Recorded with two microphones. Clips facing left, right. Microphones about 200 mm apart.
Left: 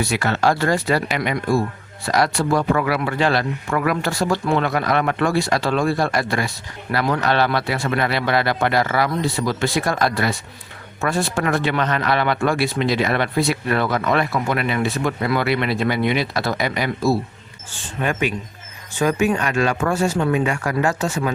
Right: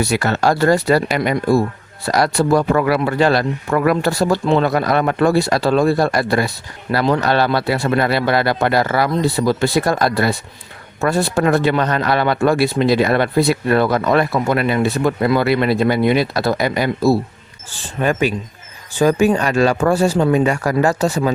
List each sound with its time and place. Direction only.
0.0 s speech: 40° right (ahead or behind)